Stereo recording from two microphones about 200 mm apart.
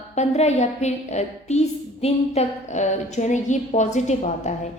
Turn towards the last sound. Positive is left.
turn(degrees=35)  # may be behind; listen again after turning